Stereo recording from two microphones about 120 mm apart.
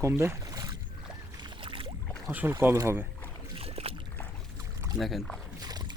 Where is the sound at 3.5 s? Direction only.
55° right (ahead or behind).